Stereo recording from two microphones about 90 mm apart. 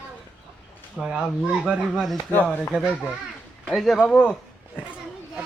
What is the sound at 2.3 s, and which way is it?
Speech, 25° left (ahead or behind).